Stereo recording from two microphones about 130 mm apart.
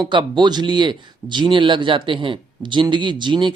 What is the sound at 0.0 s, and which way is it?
A man's voice, 35° right (ahead or behind).